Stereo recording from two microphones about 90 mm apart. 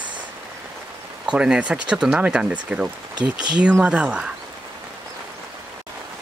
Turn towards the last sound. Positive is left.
turn(degrees=-10)  # may be behind; listen again after turning